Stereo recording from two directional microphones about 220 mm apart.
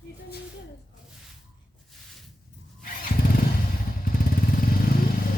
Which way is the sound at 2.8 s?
40° left (ahead or behind).